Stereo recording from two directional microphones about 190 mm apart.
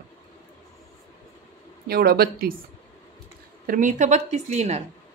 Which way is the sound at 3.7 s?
40° right (ahead or behind).